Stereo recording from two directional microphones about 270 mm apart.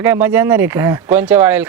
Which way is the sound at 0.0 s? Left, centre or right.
Centre.